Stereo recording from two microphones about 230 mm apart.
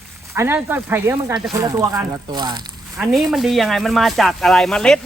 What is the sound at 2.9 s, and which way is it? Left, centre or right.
Speech, centre.